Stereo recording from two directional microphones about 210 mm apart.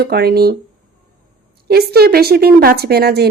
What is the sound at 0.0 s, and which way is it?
Speech, 50° right (ahead or behind).